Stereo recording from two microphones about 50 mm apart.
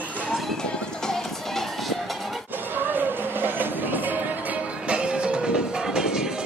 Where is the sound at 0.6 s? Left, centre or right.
Centre.